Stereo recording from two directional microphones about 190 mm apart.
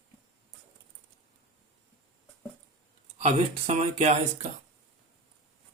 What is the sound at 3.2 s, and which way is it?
Speech, 35° right (ahead or behind).